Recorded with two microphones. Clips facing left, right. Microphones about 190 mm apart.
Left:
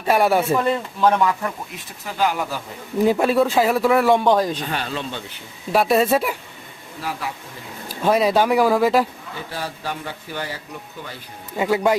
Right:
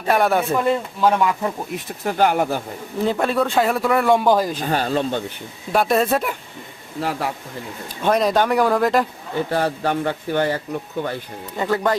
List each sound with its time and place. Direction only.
0.1 s a man's voice: 5° left (ahead or behind)
0.6 s a man's voice: 5° right (ahead or behind)
1.7 s speech: 55° right (ahead or behind)
3.0 s a man's voice: 10° left (ahead or behind)
4.6 s speech: 40° right (ahead or behind)
5.7 s a man's voice: centre (ahead or behind)
7.0 s speech: 60° right (ahead or behind)
8.0 s a man's voice: 5° left (ahead or behind)
9.5 s speech: 55° right (ahead or behind)
11.5 s speech: 10° left (ahead or behind)